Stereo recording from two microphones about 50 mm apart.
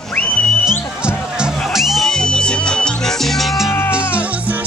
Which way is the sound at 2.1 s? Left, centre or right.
Centre.